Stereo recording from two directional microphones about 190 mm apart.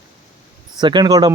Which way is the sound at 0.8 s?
20° right (ahead or behind).